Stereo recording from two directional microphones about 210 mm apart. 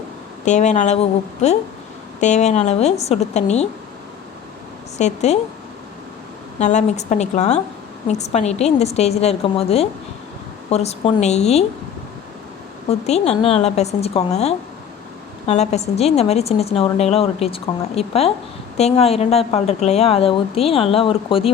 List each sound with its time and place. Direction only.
0.4 s a woman's voice: 35° left (ahead or behind)
4.9 s a woman's voice: 30° left (ahead or behind)
6.6 s a woman's voice: 35° left (ahead or behind)
12.9 s a woman's voice: 30° left (ahead or behind)